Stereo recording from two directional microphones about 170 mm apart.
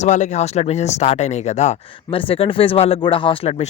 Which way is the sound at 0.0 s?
45° left (ahead or behind).